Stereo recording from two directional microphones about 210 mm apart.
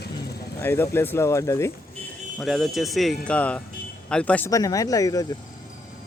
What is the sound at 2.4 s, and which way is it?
A man's voice, centre (ahead or behind).